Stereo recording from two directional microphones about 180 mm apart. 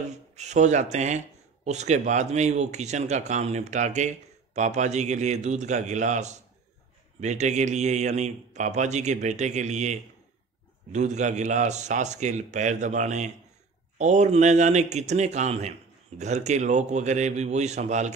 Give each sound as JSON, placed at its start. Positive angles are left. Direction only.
{"t": 0.4, "sound": "speech", "side_deg": -40}